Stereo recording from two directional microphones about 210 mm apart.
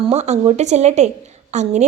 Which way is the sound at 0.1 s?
30° right (ahead or behind).